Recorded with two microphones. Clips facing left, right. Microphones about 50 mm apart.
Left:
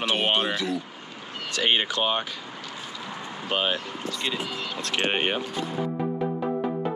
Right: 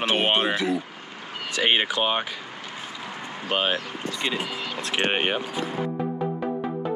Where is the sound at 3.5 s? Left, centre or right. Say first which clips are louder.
Right 2 dB; centre.